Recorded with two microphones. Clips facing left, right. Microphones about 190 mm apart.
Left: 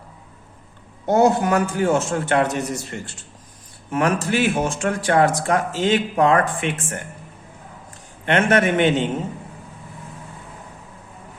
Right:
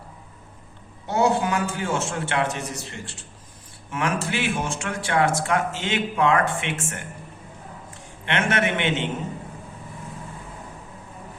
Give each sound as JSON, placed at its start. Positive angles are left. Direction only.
{"t": 1.0, "sound": "speech", "side_deg": 45}
{"t": 3.9, "sound": "a man's voice", "side_deg": 40}
{"t": 8.2, "sound": "speech", "side_deg": 40}